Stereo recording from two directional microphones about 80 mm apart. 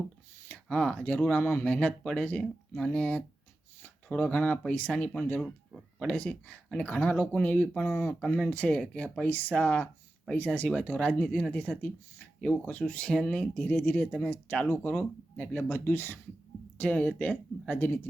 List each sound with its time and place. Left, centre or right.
0.4 s speech: centre
5.4 s speech: centre
6.1 s speech: centre